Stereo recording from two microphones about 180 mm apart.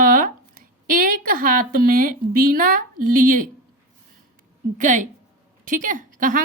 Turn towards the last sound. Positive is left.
turn(degrees=-50)  # may be behind; listen again after turning